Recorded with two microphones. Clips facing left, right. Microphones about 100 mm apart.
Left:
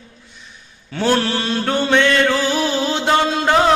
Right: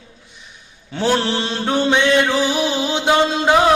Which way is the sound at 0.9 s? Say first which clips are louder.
Even; 20° right (ahead or behind).